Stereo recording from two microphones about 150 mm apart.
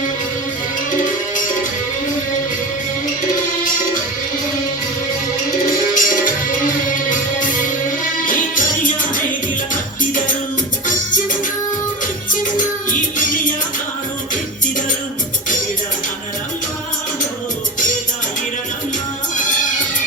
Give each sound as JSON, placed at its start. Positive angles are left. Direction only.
{"t": 5.9, "sound": "music", "side_deg": 65}
{"t": 12.3, "sound": "music", "side_deg": 60}